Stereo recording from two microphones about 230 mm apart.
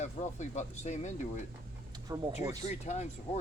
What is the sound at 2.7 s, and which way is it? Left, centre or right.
Speech, left.